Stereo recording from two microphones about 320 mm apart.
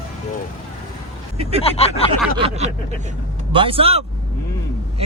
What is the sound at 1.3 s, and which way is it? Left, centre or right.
Speech, centre.